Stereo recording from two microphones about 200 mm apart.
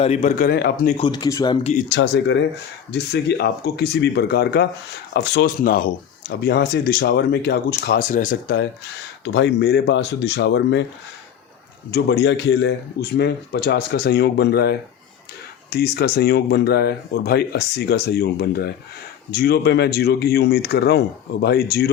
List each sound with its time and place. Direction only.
0.0 s speech: 35° left (ahead or behind)
0.9 s speech: 25° left (ahead or behind)
1.9 s speech: 65° left (ahead or behind); by 8.5 s 40° left (ahead or behind)
9.2 s speech: 60° left (ahead or behind)
11.9 s speech: 55° left (ahead or behind)